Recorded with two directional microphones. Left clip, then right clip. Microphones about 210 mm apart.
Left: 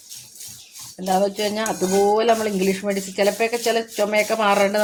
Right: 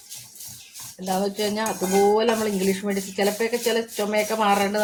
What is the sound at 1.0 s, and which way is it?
Speech, 45° left (ahead or behind).